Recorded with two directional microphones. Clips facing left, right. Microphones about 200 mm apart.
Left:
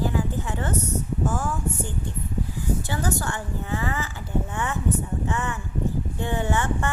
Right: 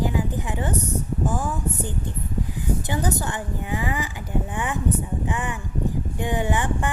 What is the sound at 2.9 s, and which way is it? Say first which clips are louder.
A woman's voice: right 2 dB; 20° right (ahead or behind).